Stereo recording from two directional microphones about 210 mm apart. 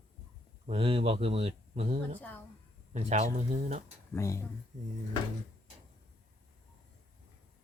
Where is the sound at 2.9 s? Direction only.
30° right (ahead or behind).